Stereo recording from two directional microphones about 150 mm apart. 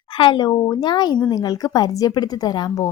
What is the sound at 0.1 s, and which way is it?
A woman's voice, 30° left (ahead or behind).